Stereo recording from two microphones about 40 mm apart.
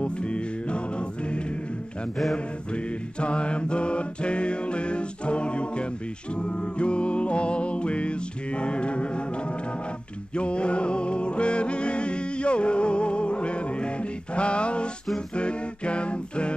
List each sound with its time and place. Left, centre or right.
0.0 s music: left
10.3 s music: left
15.3 s a capella: left